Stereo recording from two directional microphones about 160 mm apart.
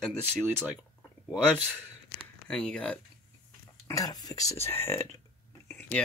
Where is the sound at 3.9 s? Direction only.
25° left (ahead or behind).